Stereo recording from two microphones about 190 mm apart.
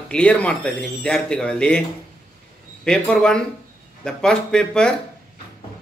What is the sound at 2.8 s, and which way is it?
A man's voice, 5° left (ahead or behind).